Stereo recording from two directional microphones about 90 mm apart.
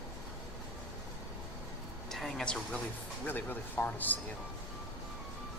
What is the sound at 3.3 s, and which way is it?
Speech, 20° left (ahead or behind).